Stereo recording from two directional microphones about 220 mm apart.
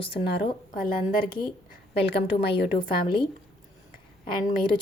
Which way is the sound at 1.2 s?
20° left (ahead or behind).